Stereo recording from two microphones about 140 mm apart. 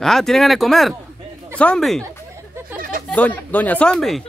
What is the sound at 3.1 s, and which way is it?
Speech, 10° left (ahead or behind).